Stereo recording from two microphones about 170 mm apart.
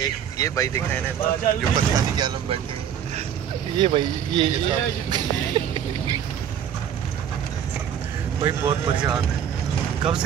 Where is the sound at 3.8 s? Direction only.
30° right (ahead or behind).